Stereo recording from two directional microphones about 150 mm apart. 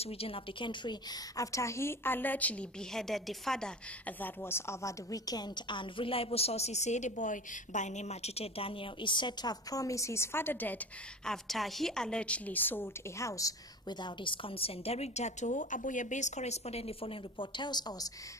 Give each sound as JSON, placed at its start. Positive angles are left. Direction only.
{"t": 0.0, "sound": "a woman's voice", "side_deg": 40}
{"t": 4.2, "sound": "a woman's voice", "side_deg": 15}
{"t": 11.2, "sound": "a woman's voice", "side_deg": 0}